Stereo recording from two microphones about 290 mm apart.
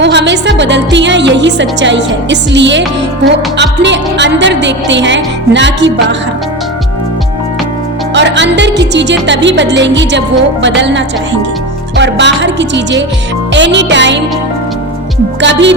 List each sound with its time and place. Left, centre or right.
0.0 s speech: right
8.1 s speech: right
15.4 s speech: right